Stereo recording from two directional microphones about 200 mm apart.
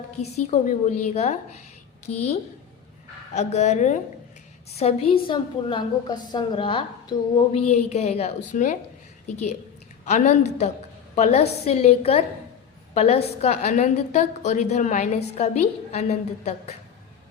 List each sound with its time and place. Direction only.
0.2 s a woman's voice: 35° left (ahead or behind)
3.3 s a woman's voice: 35° left (ahead or behind)